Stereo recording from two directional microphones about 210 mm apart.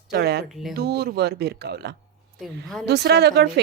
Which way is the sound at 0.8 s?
50° right (ahead or behind).